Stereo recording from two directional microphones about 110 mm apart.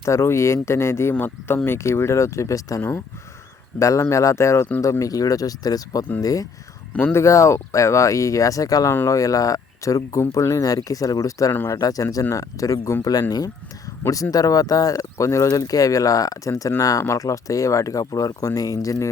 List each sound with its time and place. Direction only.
0.0 s speech: 25° left (ahead or behind)